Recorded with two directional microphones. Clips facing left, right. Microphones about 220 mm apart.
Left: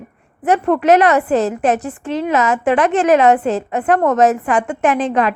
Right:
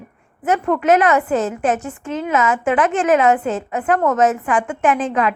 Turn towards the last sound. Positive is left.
turn(degrees=35)  # may be behind; listen again after turning